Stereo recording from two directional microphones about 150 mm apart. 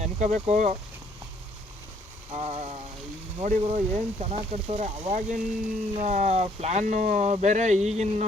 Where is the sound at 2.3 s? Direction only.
45° right (ahead or behind).